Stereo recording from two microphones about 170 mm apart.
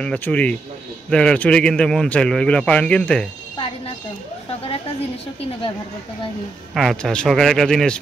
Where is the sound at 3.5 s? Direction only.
30° left (ahead or behind).